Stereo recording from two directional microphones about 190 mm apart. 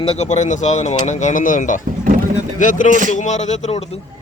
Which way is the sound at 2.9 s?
40° right (ahead or behind).